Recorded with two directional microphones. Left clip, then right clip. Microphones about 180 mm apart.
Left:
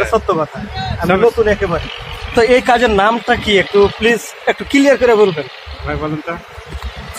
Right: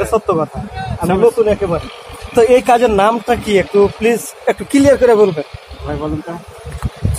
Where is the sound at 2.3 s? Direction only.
5° left (ahead or behind).